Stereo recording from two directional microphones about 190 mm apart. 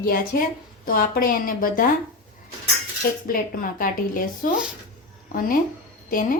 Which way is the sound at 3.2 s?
50° left (ahead or behind).